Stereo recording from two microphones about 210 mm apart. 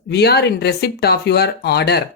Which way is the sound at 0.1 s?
50° left (ahead or behind).